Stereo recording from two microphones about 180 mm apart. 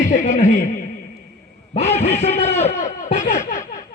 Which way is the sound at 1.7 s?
35° left (ahead or behind).